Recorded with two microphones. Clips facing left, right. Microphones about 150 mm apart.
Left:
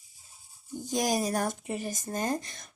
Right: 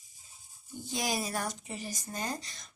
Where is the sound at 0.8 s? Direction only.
45° left (ahead or behind).